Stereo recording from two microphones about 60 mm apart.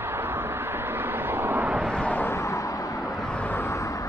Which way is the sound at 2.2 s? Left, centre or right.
Left.